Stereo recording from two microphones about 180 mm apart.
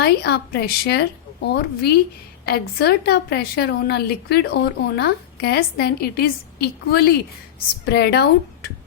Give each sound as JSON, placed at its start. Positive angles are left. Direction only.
{"t": 0.0, "sound": "a woman's voice", "side_deg": 65}